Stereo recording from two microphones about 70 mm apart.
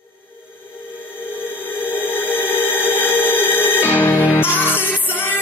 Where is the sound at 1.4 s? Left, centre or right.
Left.